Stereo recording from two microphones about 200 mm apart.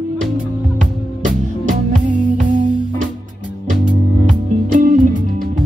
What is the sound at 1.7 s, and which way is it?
Music, 40° right (ahead or behind).